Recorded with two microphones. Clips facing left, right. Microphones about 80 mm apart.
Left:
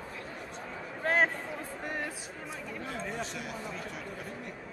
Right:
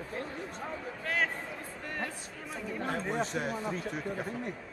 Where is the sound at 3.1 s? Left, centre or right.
Right.